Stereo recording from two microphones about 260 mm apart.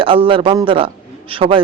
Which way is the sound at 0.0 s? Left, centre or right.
Right.